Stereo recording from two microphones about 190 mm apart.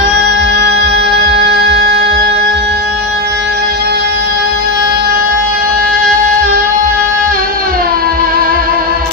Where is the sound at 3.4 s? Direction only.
60° right (ahead or behind).